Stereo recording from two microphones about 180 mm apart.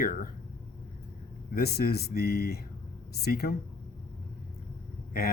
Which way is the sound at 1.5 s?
60° left (ahead or behind).